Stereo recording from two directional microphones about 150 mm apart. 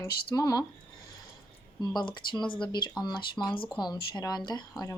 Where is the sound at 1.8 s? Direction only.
30° left (ahead or behind).